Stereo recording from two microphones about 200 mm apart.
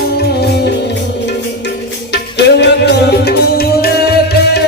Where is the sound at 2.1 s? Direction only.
55° left (ahead or behind).